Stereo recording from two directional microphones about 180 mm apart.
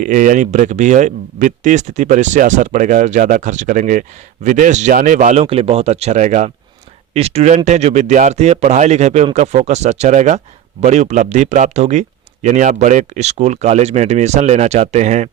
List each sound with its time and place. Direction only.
0.0 s speech: 45° right (ahead or behind)